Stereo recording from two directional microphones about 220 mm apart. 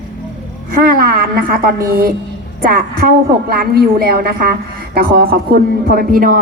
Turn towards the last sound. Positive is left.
turn(degrees=-40)  # may be behind; listen again after turning